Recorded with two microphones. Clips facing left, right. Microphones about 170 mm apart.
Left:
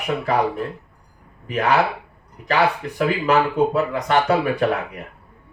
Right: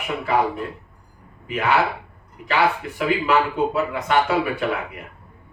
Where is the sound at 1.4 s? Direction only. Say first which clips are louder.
Left 2 dB; 40° left (ahead or behind).